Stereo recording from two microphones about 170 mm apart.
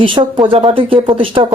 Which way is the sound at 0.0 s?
25° right (ahead or behind).